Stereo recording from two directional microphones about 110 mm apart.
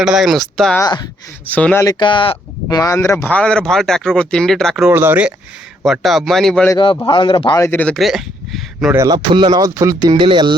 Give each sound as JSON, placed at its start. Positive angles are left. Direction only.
{"t": 0.0, "sound": "speech", "side_deg": -5}
{"t": 1.5, "sound": "speech", "side_deg": 15}
{"t": 2.0, "sound": "speech", "side_deg": 50}
{"t": 2.6, "sound": "speech", "side_deg": 35}
{"t": 3.2, "sound": "speech", "side_deg": 10}
{"t": 4.9, "sound": "speech", "side_deg": -15}
{"t": 5.8, "sound": "speech", "side_deg": 0}
{"t": 7.1, "sound": "speech", "side_deg": 50}
{"t": 7.5, "sound": "speech", "side_deg": 25}
{"t": 7.9, "sound": "a sound", "side_deg": 0}
{"t": 9.0, "sound": "speech", "side_deg": -45}
{"t": 10.2, "sound": "speech", "side_deg": -45}